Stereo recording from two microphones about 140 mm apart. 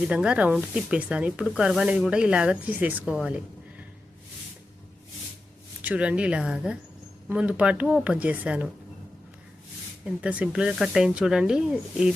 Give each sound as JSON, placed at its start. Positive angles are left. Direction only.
{"t": 0.1, "sound": "speech", "side_deg": -5}
{"t": 5.8, "sound": "speech", "side_deg": -10}
{"t": 10.2, "sound": "speech", "side_deg": -10}